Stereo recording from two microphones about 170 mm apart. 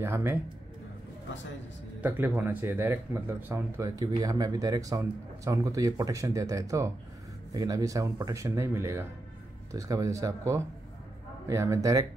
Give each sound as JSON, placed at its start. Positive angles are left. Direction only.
{"t": 0.0, "sound": "speech", "side_deg": -15}
{"t": 2.0, "sound": "speech", "side_deg": -10}